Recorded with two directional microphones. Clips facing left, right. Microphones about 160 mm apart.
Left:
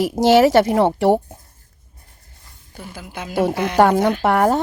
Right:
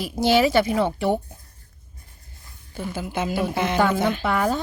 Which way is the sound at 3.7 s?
75° left (ahead or behind).